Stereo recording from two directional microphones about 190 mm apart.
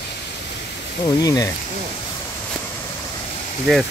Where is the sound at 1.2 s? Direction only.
20° left (ahead or behind).